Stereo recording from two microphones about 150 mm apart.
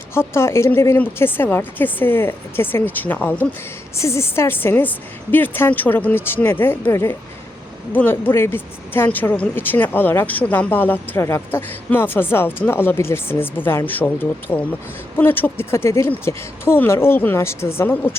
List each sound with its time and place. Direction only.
0.1 s speech: 15° left (ahead or behind)